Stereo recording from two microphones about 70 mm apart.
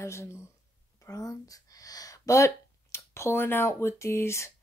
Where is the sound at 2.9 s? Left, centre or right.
Left.